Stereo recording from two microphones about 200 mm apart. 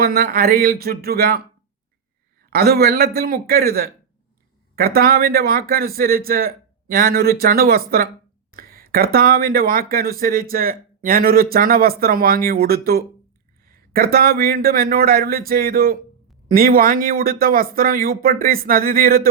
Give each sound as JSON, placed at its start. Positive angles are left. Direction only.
{"t": 0.0, "sound": "speech", "side_deg": -50}
{"t": 2.5, "sound": "speech", "side_deg": -50}